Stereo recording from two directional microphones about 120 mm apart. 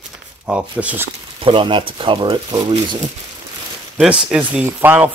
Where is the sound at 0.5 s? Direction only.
10° right (ahead or behind).